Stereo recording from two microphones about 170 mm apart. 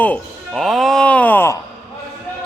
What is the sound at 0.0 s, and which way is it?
Music, 5° left (ahead or behind).